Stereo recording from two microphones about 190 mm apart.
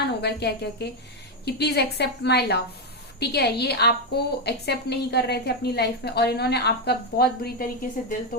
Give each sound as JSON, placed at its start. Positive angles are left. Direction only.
{"t": 0.2, "sound": "a woman's voice", "side_deg": 60}